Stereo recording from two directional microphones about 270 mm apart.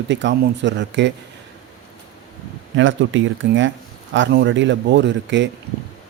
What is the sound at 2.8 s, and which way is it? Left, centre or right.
Speech, right.